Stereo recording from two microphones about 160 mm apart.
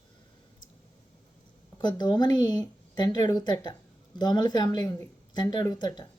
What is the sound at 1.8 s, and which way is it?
A woman's voice, 25° left (ahead or behind).